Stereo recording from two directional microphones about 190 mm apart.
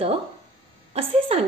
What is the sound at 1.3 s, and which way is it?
Speech, 30° right (ahead or behind).